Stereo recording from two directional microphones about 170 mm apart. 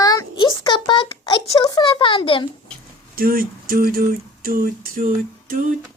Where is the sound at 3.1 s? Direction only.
60° right (ahead or behind).